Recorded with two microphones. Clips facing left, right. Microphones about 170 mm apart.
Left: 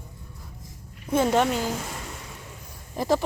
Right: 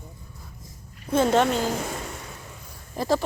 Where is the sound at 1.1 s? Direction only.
15° left (ahead or behind).